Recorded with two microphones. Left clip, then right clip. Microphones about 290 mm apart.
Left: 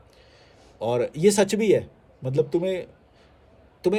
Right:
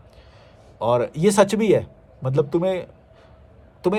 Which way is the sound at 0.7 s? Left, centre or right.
Centre.